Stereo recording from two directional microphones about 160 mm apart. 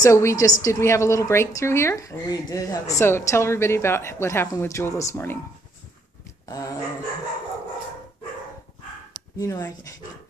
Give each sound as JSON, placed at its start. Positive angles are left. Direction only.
{"t": 0.0, "sound": "a woman's voice", "side_deg": 20}
{"t": 6.4, "sound": "dog", "side_deg": 20}
{"t": 9.4, "sound": "speech", "side_deg": 20}